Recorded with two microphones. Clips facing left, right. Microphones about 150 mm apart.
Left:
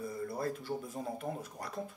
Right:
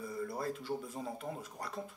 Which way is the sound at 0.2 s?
45° left (ahead or behind).